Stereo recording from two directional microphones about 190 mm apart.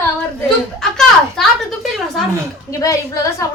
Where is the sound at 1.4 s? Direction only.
Centre (ahead or behind).